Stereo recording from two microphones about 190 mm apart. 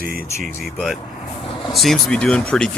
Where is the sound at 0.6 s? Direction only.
Centre (ahead or behind).